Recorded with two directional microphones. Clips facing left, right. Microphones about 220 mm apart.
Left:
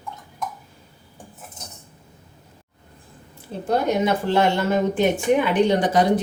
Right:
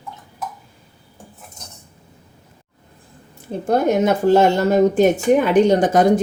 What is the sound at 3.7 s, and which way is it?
Speech, 50° right (ahead or behind).